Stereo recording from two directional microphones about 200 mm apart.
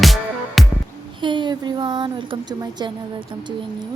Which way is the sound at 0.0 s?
Centre (ahead or behind).